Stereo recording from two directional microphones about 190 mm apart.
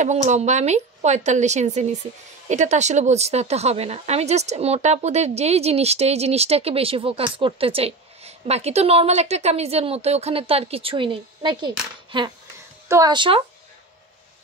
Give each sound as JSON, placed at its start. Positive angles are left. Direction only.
{"t": 0.0, "sound": "speech", "side_deg": -40}